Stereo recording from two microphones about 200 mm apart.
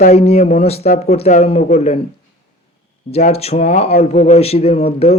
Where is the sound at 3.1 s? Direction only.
30° left (ahead or behind).